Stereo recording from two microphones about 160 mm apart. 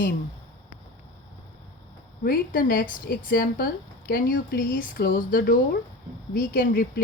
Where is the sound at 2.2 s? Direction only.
65° left (ahead or behind).